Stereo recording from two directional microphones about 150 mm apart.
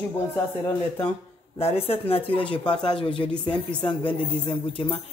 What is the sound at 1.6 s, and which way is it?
Speech, 40° left (ahead or behind).